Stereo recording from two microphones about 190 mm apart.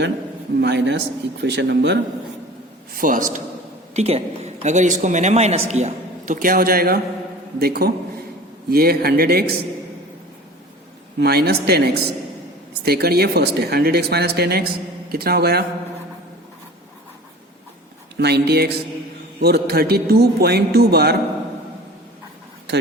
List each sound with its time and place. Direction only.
0.6 s speech: 65° right (ahead or behind)
2.9 s speech: 45° right (ahead or behind)
3.9 s a man's voice: 35° right (ahead or behind); by 9.5 s 55° right (ahead or behind)
11.2 s speech: 55° right (ahead or behind)
18.2 s speech: 60° right (ahead or behind)